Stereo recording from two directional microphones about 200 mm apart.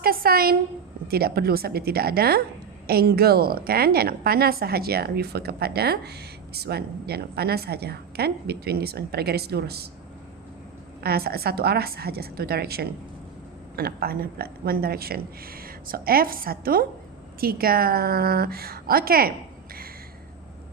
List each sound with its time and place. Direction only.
0.0 s a sound: 50° right (ahead or behind)
1.0 s a woman's voice: 50° right (ahead or behind)
11.0 s a woman's voice: 50° right (ahead or behind)